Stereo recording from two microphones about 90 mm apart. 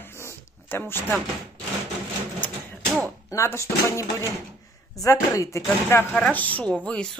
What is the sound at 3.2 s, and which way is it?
Speech, 35° left (ahead or behind).